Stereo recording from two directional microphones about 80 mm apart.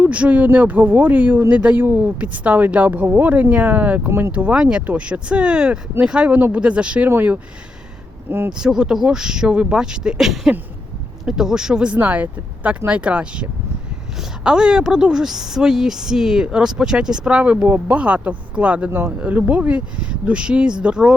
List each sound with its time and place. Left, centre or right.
0.0 s speech: centre
7.1 s speech: right
8.4 s speech: centre
18.9 s speech: right; by 21.2 s centre